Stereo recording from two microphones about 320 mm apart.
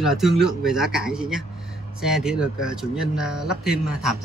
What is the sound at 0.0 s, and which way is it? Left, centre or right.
Speech, centre.